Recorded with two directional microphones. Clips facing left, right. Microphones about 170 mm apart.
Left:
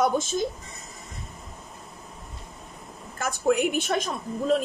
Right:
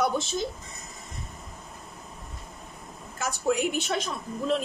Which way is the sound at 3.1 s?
55° left (ahead or behind).